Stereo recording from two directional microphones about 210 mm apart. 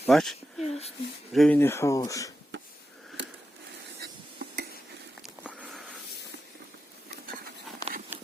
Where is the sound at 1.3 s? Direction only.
Centre (ahead or behind).